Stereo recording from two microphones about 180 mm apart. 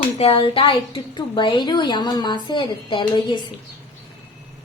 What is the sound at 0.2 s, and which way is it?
A woman's voice, 30° left (ahead or behind).